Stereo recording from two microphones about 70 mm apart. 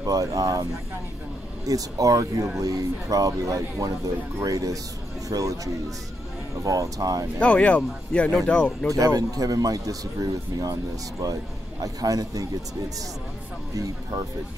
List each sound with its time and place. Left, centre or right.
0.0 s a man's voice: right
1.7 s a man's voice: right
6.6 s a man's voice: right
7.3 s speech: centre
8.9 s a man's voice: right
13.7 s a man's voice: right